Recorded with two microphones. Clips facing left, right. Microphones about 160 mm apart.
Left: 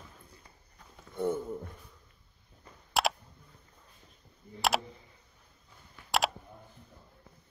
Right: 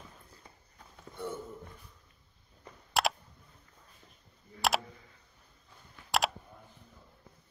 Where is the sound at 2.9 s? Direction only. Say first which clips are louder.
Left 1 dB; centre (ahead or behind).